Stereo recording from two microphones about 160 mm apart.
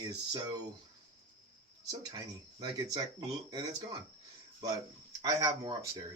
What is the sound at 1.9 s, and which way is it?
Speech, 25° right (ahead or behind).